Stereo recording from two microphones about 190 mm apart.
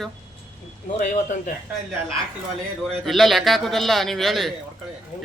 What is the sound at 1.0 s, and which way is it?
Speech, 40° left (ahead or behind).